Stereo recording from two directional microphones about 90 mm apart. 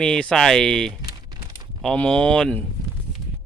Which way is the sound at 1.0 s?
50° right (ahead or behind).